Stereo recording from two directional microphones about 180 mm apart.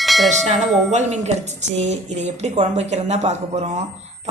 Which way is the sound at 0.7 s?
Centre (ahead or behind).